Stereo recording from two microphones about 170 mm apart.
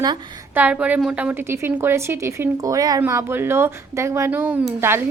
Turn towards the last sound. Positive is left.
turn(degrees=-10)  # may be behind; listen again after turning